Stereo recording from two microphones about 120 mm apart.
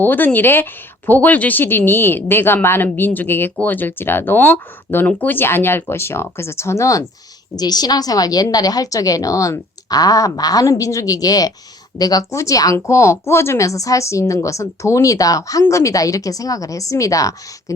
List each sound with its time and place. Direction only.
0.0 s a woman's voice: 15° left (ahead or behind)